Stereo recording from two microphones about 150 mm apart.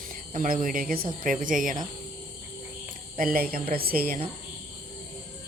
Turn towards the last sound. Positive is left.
turn(degrees=-80)